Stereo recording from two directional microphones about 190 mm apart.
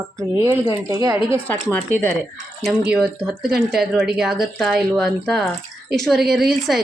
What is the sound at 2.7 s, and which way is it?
A woman's voice, 5° right (ahead or behind).